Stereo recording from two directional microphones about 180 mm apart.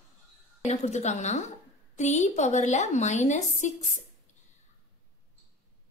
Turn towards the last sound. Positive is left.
turn(degrees=40)  # may be behind; listen again after turning